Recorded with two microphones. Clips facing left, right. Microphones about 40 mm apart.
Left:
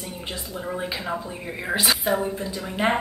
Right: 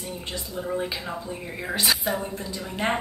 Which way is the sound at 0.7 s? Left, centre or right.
Centre.